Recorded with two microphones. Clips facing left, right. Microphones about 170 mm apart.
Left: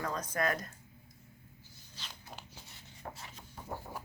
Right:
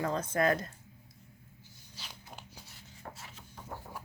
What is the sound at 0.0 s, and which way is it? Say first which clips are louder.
Speech: right 4 dB; 25° right (ahead or behind).